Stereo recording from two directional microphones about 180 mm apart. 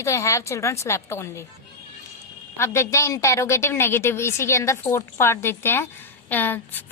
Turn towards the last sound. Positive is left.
turn(degrees=10)  # may be behind; listen again after turning